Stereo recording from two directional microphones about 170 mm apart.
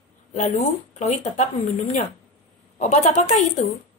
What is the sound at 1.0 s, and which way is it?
Speech, 45° left (ahead or behind).